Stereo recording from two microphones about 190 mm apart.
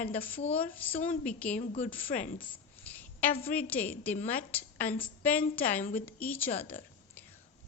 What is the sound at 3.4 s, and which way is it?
A woman's voice, 10° left (ahead or behind).